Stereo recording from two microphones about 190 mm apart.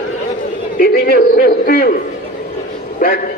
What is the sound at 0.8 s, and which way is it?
A man's voice, 55° left (ahead or behind).